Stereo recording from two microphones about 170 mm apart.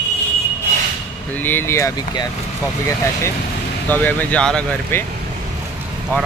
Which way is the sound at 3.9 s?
10° left (ahead or behind).